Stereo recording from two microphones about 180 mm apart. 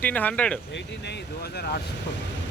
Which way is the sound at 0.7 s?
70° left (ahead or behind).